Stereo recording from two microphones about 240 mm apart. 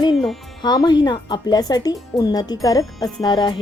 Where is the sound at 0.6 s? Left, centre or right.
Centre.